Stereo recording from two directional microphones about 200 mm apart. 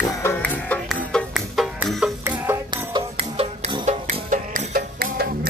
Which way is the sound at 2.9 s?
30° right (ahead or behind).